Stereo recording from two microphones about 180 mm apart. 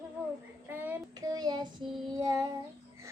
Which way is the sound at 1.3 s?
20° right (ahead or behind).